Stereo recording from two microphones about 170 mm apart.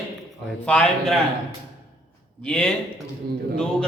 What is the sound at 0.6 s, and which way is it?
Speech, 5° left (ahead or behind).